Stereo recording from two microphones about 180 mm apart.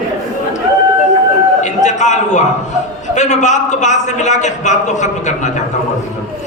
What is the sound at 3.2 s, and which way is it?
A man's voice, 40° left (ahead or behind).